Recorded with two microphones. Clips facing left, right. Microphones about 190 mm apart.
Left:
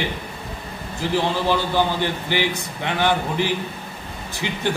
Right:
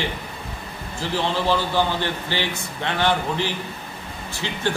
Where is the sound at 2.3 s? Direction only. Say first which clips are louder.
Left 4 dB; 15° left (ahead or behind).